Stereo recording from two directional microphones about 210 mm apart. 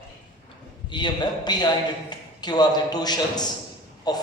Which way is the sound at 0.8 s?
20° left (ahead or behind).